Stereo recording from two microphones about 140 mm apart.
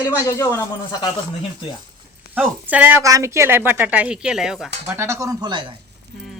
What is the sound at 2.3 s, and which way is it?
A woman's voice, 10° right (ahead or behind).